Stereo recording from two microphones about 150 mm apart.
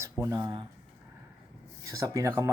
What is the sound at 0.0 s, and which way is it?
Speech, 20° right (ahead or behind).